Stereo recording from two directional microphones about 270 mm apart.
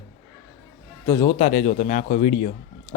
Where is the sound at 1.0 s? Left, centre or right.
Centre.